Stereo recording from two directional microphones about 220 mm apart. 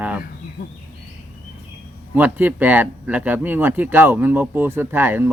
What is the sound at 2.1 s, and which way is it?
Speech, 10° right (ahead or behind).